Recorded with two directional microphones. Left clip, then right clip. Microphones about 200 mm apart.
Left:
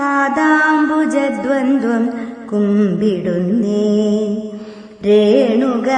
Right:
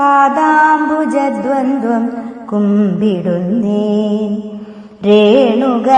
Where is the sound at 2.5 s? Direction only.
15° left (ahead or behind).